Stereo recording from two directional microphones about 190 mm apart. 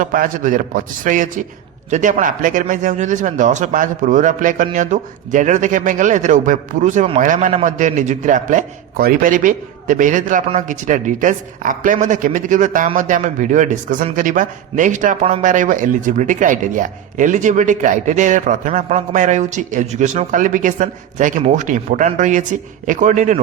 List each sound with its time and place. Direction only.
0.0 s a man's voice: 45° right (ahead or behind)